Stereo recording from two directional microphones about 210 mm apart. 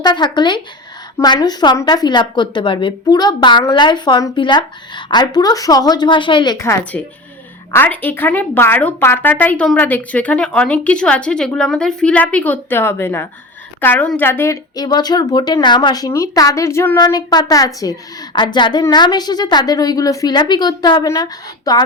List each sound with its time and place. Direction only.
0.0 s a woman's voice: 20° left (ahead or behind)